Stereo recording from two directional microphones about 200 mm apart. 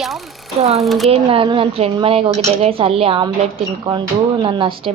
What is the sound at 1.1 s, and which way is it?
A woman's voice, 25° right (ahead or behind).